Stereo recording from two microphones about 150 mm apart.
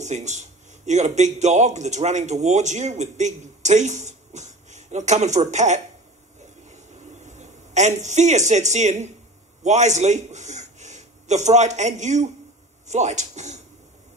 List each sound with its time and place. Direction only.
0.0 s a man's voice: 50° right (ahead or behind)
6.7 s a sound: 50° right (ahead or behind)
9.6 s a man's voice: 50° right (ahead or behind)